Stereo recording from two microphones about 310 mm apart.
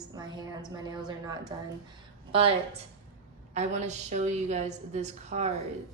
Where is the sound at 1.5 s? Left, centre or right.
Centre.